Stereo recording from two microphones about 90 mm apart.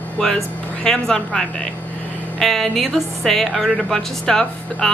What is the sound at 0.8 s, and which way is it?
A woman's voice, 5° left (ahead or behind).